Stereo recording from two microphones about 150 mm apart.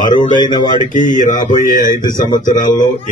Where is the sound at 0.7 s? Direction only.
55° left (ahead or behind).